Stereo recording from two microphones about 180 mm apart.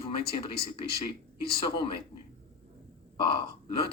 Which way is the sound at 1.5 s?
30° left (ahead or behind).